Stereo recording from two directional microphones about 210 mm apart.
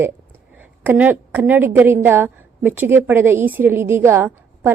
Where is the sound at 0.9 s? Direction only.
10° right (ahead or behind).